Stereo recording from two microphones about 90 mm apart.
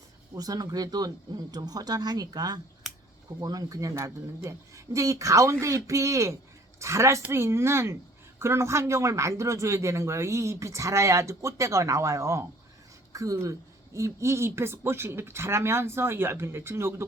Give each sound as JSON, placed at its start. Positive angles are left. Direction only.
{"t": 0.3, "sound": "a man's voice", "side_deg": -45}